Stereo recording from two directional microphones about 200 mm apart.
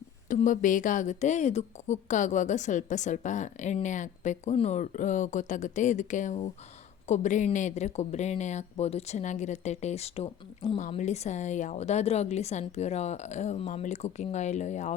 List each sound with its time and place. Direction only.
0.3 s speech: 40° left (ahead or behind)